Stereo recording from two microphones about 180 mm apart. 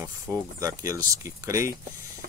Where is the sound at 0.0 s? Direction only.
15° right (ahead or behind).